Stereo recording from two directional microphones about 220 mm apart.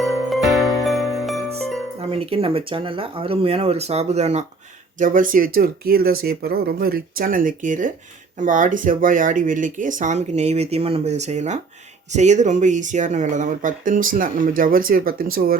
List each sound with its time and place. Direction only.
0.0 s jingle bell: centre (ahead or behind)
2.0 s speech: 25° right (ahead or behind); by 15.5 s 40° right (ahead or behind)